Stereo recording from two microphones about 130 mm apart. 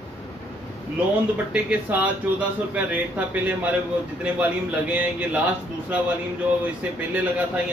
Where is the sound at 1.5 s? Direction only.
10° right (ahead or behind).